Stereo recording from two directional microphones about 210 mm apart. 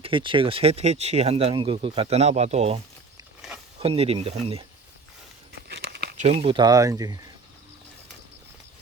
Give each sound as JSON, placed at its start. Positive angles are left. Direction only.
{"t": 0.0, "sound": "speech", "side_deg": -25}
{"t": 3.8, "sound": "speech", "side_deg": -30}
{"t": 5.6, "sound": "crumpling", "side_deg": -50}
{"t": 6.1, "sound": "speech", "side_deg": -30}